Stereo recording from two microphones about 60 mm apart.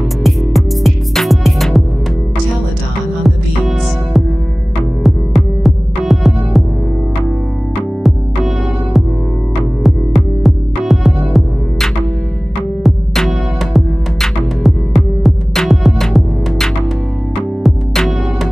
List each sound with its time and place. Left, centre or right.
0.2 s music: centre
3.3 s music: centre
8.0 s music: centre